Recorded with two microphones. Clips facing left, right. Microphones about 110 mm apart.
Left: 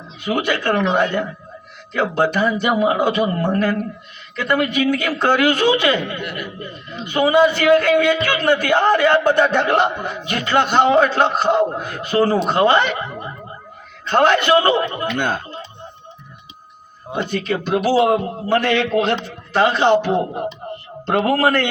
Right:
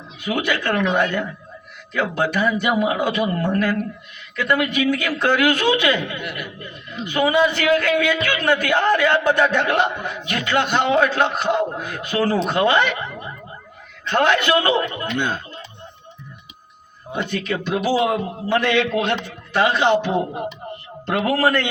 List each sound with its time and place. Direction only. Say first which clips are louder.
0.3 s a man's voice: left 2 dB; 45° left (ahead or behind)
0.6 s a man's voice: left 2 dB; 30° left (ahead or behind)
6.2 s speech: left 2 dB; 5° right (ahead or behind)
7.1 s a man's voice: left 3 dB; 40° left (ahead or behind)
9.3 s a man's voice: left 2 dB; 30° left (ahead or behind)
17.1 s a man's voice: left 3 dB; 35° left (ahead or behind)
21.1 s a man's voice: left 2 dB; 35° left (ahead or behind)